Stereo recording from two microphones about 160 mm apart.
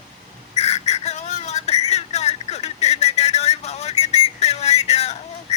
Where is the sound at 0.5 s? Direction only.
45° left (ahead or behind).